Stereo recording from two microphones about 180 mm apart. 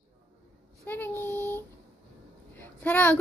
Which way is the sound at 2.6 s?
10° left (ahead or behind).